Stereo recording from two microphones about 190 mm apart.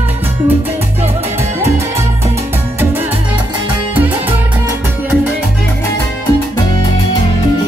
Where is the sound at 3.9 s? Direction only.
10° right (ahead or behind).